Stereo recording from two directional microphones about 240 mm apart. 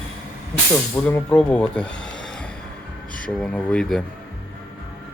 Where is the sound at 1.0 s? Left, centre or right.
Centre.